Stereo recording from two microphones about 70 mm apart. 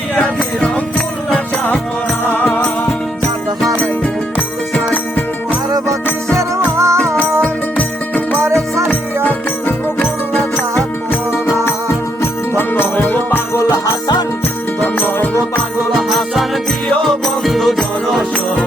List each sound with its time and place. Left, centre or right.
0.2 s music: centre
6.7 s music: right
7.4 s music: left
8.4 s music: right
8.9 s music: left
12.2 s music: left
14.8 s music: left
15.9 s music: centre